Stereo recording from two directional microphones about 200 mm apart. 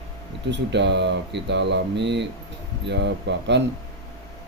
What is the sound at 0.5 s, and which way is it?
Speech, 60° right (ahead or behind).